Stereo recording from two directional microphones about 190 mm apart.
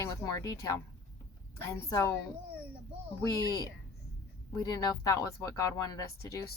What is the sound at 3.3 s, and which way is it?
Speech, 20° left (ahead or behind).